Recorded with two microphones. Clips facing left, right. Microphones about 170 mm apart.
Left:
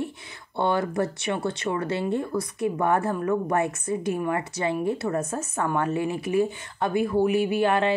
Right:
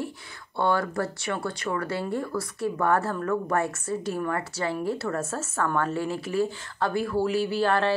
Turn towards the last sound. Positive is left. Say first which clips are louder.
# left 2 dB
turn(degrees=15)  # may be behind; listen again after turning